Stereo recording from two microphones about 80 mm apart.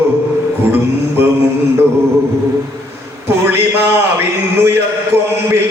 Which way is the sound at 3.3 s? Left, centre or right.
Right.